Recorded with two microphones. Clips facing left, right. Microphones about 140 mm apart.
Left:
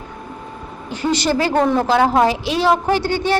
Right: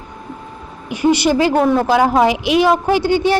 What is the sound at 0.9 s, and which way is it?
A woman's voice, 15° right (ahead or behind).